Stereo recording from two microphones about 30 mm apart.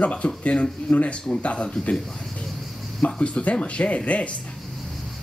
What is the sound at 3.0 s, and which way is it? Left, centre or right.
Speech, left.